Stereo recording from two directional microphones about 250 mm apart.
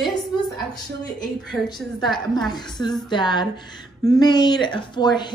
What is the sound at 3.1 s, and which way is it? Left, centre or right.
Speech, centre.